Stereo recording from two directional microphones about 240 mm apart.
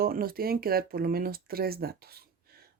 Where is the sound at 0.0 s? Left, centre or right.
Right.